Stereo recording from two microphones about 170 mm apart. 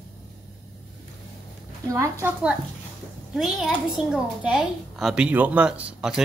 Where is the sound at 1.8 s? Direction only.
15° right (ahead or behind).